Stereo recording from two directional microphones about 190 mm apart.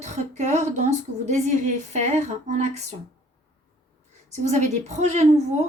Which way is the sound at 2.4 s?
40° right (ahead or behind).